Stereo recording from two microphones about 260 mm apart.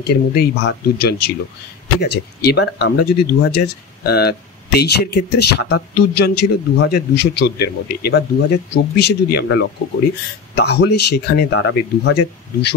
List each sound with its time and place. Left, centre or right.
0.0 s speech: left